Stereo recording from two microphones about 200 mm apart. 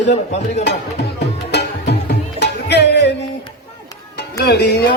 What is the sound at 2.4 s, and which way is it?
Music, 55° left (ahead or behind).